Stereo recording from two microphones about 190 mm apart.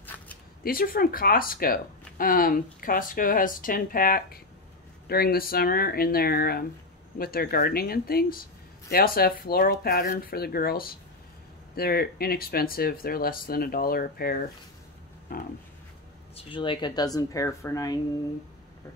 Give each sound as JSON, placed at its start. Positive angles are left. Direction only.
{"t": 0.7, "sound": "speech", "side_deg": 50}
{"t": 16.3, "sound": "speech", "side_deg": 25}